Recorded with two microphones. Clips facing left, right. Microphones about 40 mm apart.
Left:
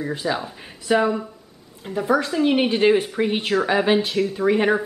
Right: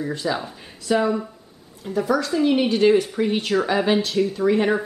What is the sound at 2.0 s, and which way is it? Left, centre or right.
Speech, left.